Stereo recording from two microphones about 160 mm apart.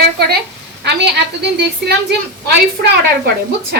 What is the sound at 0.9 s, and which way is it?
Speech, 90° right.